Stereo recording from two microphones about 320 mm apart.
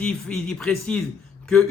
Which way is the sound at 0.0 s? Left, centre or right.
Centre.